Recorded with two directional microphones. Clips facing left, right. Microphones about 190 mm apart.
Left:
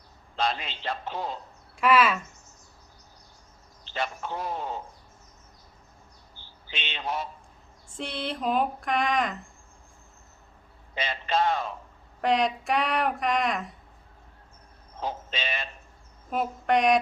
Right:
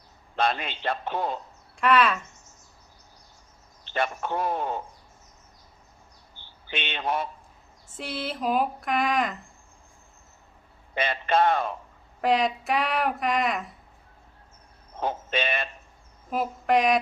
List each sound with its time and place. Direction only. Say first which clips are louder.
0.3 s a man's voice: right 3 dB; 55° right (ahead or behind)
1.7 s speech: even; 5° left (ahead or behind)
3.8 s a man's voice: right 4 dB; 55° right (ahead or behind)
6.7 s a man's voice: right 4 dB; 55° right (ahead or behind)
7.9 s speech: even; 5° right (ahead or behind)
10.9 s a man's voice: right 4 dB; 55° right (ahead or behind)
12.2 s speech: right 1 dB; centre (ahead or behind)
14.9 s speech: right 5 dB; 55° right (ahead or behind)
16.3 s speech: right 1 dB; centre (ahead or behind)